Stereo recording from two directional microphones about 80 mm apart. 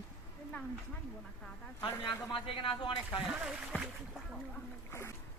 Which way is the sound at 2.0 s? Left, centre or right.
Left.